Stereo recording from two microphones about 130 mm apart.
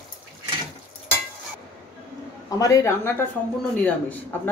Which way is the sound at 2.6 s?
25° left (ahead or behind).